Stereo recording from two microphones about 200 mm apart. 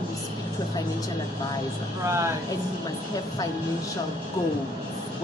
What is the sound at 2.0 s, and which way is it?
Speech, 15° right (ahead or behind).